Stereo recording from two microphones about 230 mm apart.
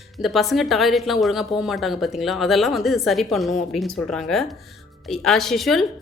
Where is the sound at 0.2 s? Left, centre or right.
Centre.